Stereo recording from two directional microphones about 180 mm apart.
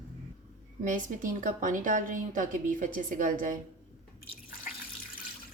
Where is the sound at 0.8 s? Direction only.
45° right (ahead or behind).